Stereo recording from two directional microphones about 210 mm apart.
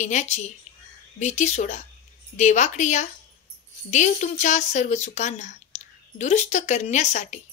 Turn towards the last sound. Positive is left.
turn(degrees=35)  # may be behind; listen again after turning